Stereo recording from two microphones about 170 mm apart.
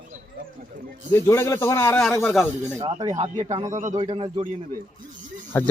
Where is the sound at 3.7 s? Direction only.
45° right (ahead or behind).